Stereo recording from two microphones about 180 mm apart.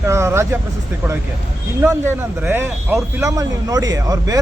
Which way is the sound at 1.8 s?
15° right (ahead or behind).